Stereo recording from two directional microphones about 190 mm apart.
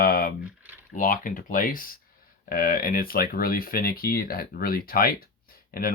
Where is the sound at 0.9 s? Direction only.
45° left (ahead or behind).